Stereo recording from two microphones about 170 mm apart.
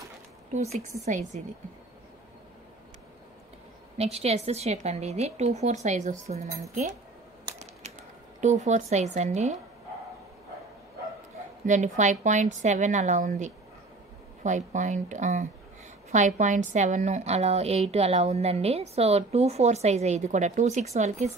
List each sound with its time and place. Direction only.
0.7 s a woman's voice: 45° right (ahead or behind)
4.0 s a woman's voice: 35° right (ahead or behind)
8.4 s a woman's voice: 45° right (ahead or behind)
11.6 s a woman's voice: 45° right (ahead or behind)